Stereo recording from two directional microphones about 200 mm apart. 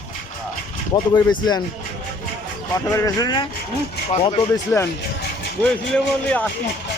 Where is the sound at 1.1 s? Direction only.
20° left (ahead or behind).